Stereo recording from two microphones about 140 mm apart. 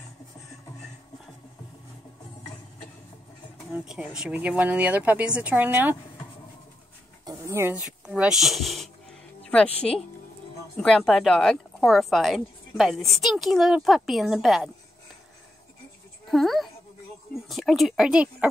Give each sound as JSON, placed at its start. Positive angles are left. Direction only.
{"t": 3.7, "sound": "speech", "side_deg": -5}
{"t": 7.2, "sound": "dog", "side_deg": -20}
{"t": 7.8, "sound": "music", "side_deg": -5}
{"t": 10.8, "sound": "speech", "side_deg": 5}
{"t": 16.3, "sound": "a woman's voice", "side_deg": 0}